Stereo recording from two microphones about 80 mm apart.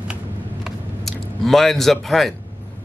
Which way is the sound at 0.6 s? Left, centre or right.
Centre.